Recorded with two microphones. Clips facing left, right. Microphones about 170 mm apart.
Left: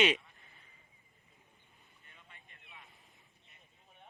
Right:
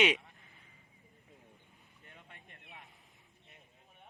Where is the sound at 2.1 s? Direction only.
65° right (ahead or behind).